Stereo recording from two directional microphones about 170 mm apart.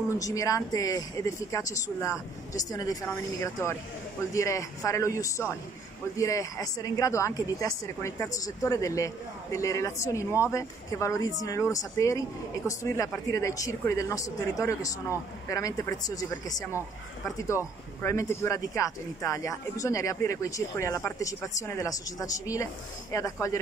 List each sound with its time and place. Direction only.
0.2 s a woman's voice: 20° left (ahead or behind)
17.5 s speech: 10° right (ahead or behind)
18.0 s speech: 15° left (ahead or behind)